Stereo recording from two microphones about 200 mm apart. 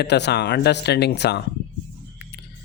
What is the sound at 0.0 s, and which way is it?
Speech, 55° left (ahead or behind).